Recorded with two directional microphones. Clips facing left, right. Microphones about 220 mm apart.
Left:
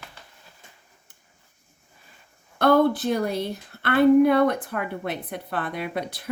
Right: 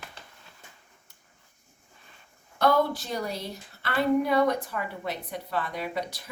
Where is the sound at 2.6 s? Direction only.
55° left (ahead or behind).